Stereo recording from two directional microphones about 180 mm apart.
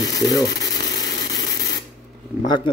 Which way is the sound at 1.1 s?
75° left (ahead or behind).